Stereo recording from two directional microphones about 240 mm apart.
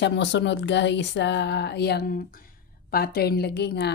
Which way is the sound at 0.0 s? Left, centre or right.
Left.